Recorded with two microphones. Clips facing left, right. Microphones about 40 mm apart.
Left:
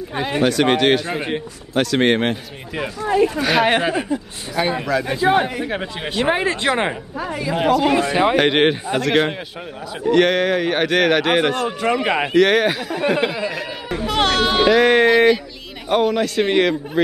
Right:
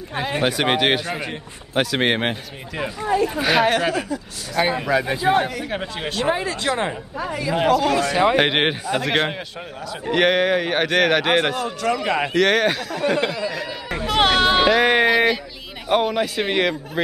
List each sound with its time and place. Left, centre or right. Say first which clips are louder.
0.1 s speech: left 1 dB; centre
0.4 s speech: left 4 dB; centre
3.6 s speech: left 2 dB; left
4.6 s speech: even; centre
5.3 s speech: even; centre
6.2 s speech: left 4 dB; left
7.2 s speech: right 1 dB; centre
7.8 s speech: left 2 dB; left
8.4 s speech: left 3 dB; centre
11.8 s speech: left 1 dB; left
12.3 s speech: left 3 dB; centre
13.6 s speech: left 2 dB; centre